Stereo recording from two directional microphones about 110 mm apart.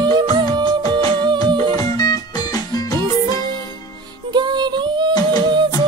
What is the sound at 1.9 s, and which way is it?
Music, 35° left (ahead or behind).